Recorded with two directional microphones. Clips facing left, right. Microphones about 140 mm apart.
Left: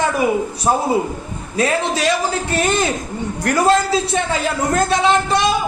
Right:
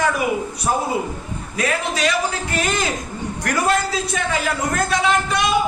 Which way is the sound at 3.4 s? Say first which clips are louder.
Left 5 dB; 30° left (ahead or behind).